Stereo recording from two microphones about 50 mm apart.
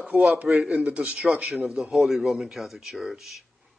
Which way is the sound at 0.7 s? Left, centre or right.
Right.